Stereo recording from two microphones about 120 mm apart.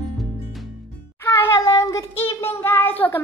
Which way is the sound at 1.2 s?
20° left (ahead or behind).